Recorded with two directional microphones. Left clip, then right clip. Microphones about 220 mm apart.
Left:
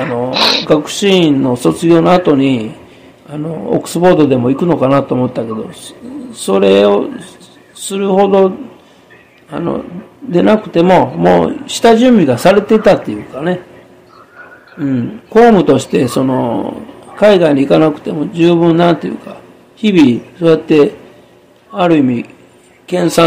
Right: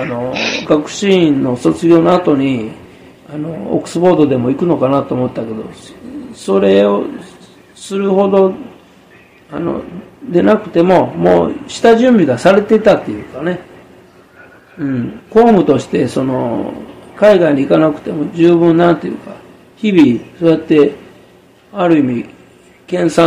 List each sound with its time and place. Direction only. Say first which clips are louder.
0.0 s speech: left 5 dB; 40° left (ahead or behind)
6.4 s speech: left 2 dB; 35° left (ahead or behind)
9.5 s speech: left 1 dB; 40° left (ahead or behind)
14.8 s speech: left 2 dB; 35° left (ahead or behind)